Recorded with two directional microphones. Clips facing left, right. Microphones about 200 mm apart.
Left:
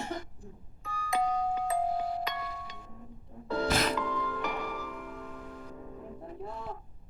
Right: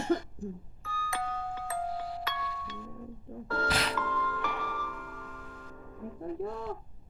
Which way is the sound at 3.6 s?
45° left (ahead or behind).